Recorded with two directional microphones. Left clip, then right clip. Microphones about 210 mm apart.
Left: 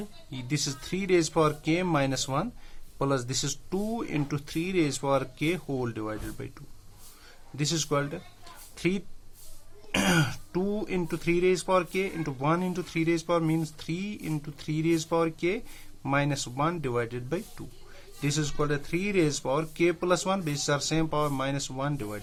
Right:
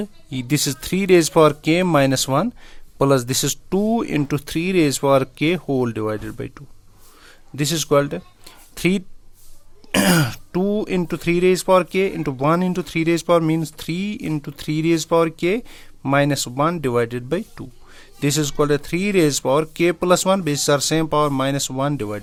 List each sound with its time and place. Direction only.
0.0 s speech: 45° right (ahead or behind)